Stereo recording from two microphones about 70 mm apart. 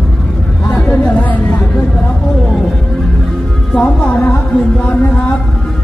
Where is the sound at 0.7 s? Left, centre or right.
Left.